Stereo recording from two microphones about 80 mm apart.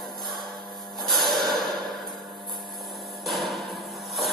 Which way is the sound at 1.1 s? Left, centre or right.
Centre.